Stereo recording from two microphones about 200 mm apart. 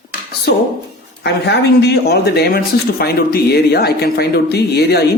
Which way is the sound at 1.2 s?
55° left (ahead or behind).